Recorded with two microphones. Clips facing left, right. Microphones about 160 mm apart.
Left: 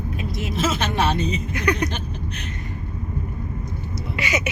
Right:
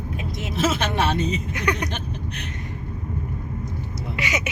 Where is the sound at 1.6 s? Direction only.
20° right (ahead or behind).